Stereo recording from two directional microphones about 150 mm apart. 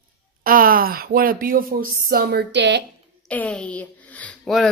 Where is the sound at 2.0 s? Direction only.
90° right.